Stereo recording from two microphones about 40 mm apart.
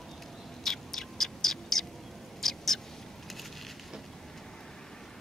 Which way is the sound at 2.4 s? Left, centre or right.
Centre.